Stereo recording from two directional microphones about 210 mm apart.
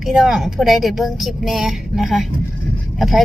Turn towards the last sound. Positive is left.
turn(degrees=0)  # may be behind; listen again after turning